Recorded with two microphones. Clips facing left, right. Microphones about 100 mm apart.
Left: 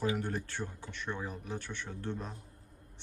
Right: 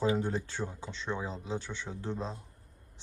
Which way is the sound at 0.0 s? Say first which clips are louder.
Right 4 dB; 20° right (ahead or behind).